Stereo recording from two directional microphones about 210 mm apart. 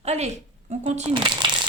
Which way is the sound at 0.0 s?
30° right (ahead or behind).